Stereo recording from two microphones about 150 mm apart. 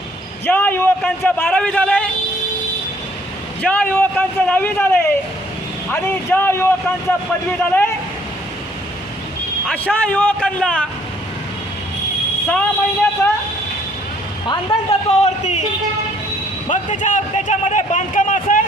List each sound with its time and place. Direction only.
0.4 s a man's voice: 10° left (ahead or behind)
3.6 s a man's voice: 10° left (ahead or behind)
9.6 s a man's voice: 10° left (ahead or behind)
12.5 s a man's voice: 10° left (ahead or behind)
14.4 s a woman's voice: 30° left (ahead or behind); by 15.6 s 50° left (ahead or behind)
16.6 s a man's voice: 55° left (ahead or behind)